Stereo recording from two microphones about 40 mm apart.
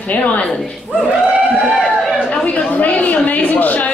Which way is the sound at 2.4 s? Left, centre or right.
Left.